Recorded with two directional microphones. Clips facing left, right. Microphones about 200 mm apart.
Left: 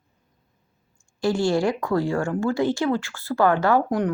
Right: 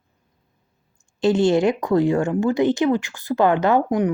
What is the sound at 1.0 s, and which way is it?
Speech, 20° right (ahead or behind).